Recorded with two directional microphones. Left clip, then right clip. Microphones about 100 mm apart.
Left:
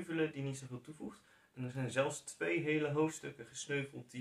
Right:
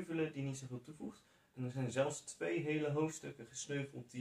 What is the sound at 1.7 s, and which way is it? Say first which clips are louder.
Speech: left 2 dB; centre (ahead or behind).